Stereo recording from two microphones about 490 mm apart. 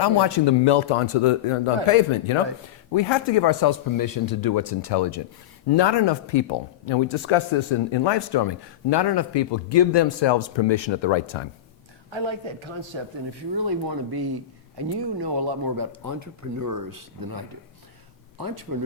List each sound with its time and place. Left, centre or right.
0.0 s a man's voice: left
2.9 s speech: left
12.1 s speech: right